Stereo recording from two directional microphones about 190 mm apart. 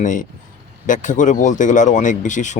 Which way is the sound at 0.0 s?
45° left (ahead or behind).